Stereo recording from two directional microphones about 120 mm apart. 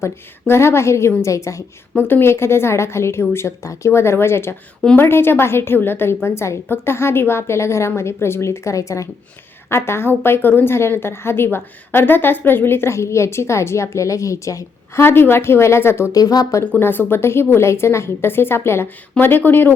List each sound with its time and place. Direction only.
0.0 s a woman's voice: 20° left (ahead or behind)
16.1 s a woman's voice: 30° left (ahead or behind)